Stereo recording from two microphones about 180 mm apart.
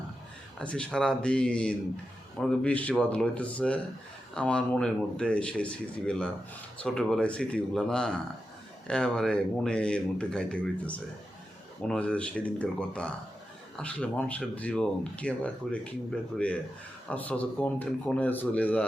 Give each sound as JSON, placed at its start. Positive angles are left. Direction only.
{"t": 0.6, "sound": "speech", "side_deg": 5}
{"t": 17.1, "sound": "speech", "side_deg": 10}